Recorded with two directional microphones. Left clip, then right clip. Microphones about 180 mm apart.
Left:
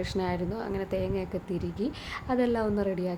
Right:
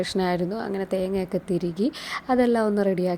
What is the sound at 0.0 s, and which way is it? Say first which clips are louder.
A woman's voice: right 6 dB; 35° right (ahead or behind).